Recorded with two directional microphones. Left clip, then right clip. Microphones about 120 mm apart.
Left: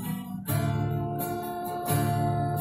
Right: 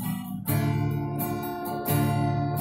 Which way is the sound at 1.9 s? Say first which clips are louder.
Right 1 dB; 40° right (ahead or behind).